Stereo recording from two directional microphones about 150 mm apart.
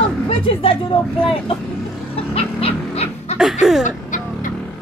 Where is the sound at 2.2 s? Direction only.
40° left (ahead or behind).